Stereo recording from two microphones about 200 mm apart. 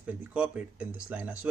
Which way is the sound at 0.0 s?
5° right (ahead or behind).